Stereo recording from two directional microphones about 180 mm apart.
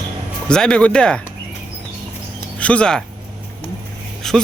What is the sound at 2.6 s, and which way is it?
Speech, 5° left (ahead or behind).